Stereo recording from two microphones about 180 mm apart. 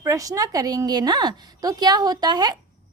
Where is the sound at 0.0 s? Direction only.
20° right (ahead or behind).